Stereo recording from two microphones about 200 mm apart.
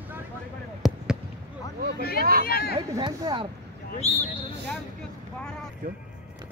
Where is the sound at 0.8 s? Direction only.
5° right (ahead or behind).